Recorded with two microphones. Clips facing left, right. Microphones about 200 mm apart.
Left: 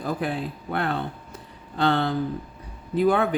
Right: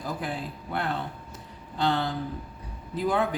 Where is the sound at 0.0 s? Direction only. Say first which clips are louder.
Left 5 dB; 60° left (ahead or behind).